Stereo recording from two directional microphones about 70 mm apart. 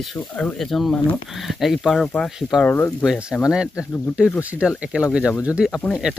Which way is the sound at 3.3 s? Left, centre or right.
Centre.